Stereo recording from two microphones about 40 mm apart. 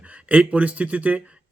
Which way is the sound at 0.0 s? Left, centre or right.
Right.